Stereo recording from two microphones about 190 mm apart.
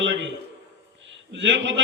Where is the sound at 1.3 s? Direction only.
70° right (ahead or behind).